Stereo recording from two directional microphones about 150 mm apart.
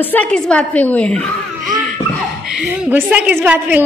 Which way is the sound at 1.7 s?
60° right (ahead or behind).